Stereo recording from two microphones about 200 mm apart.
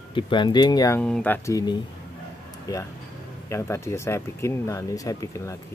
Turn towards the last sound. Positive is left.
turn(degrees=15)  # may be behind; listen again after turning